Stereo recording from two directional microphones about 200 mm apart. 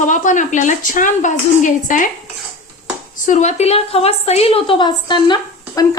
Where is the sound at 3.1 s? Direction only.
35° left (ahead or behind).